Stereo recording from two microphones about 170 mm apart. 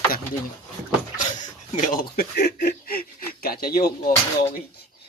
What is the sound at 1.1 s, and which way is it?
Speech, 45° left (ahead or behind).